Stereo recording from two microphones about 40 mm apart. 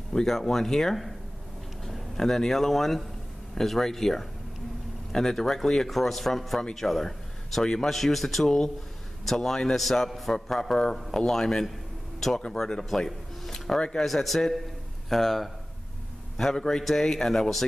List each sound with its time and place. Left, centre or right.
0.1 s speech: centre
14.0 s speech: centre